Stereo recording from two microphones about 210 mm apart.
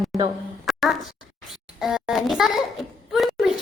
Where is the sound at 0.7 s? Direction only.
Centre (ahead or behind).